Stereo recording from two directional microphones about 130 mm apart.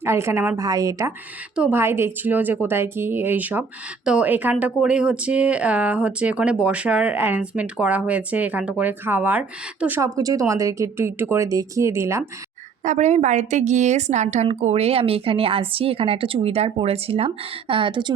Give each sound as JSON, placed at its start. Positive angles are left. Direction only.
{"t": 0.0, "sound": "a woman's voice", "side_deg": -20}
{"t": 1.5, "sound": "speech", "side_deg": -10}
{"t": 10.0, "sound": "a woman's voice", "side_deg": -25}
{"t": 12.8, "sound": "a woman's voice", "side_deg": -70}